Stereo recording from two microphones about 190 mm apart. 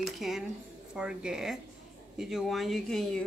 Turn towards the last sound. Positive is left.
turn(degrees=0)  # may be behind; listen again after turning